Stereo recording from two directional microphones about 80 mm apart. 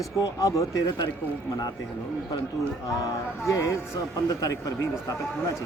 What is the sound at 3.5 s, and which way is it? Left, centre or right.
Speech, left.